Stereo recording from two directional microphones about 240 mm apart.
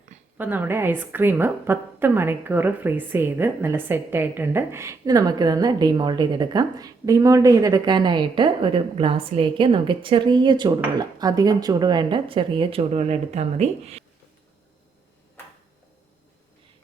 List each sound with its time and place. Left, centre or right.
0.3 s a woman's voice: centre; by 14.0 s right